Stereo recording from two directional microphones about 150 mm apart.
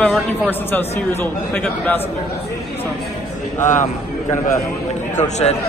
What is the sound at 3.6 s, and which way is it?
Speech, 60° left (ahead or behind).